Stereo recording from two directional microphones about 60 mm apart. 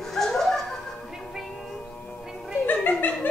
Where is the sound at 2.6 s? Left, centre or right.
Left.